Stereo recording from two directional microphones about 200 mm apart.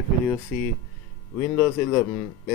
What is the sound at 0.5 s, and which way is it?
Speech, 5° left (ahead or behind).